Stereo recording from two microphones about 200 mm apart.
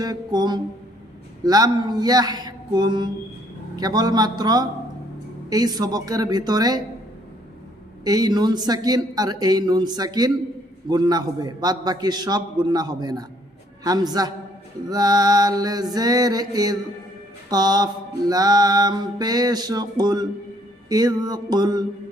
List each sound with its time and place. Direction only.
0.0 s a man's voice: 20° right (ahead or behind)
8.0 s a man's voice: 20° right (ahead or behind)